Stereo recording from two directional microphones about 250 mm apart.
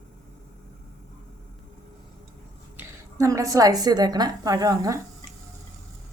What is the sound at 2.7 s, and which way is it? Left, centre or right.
A woman's voice, centre.